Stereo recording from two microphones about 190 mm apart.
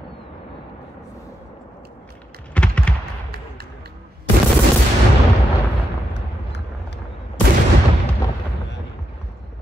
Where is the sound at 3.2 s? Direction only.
55° right (ahead or behind).